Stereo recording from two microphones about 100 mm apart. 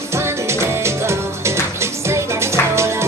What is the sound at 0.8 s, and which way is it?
Music, 25° right (ahead or behind).